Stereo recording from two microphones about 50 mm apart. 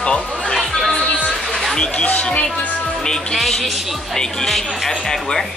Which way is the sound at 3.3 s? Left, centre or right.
Centre.